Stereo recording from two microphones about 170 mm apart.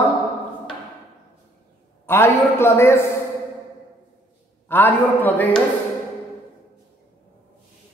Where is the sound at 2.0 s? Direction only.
15° left (ahead or behind).